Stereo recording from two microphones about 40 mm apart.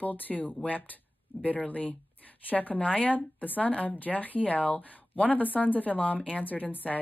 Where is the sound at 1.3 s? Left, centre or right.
Left.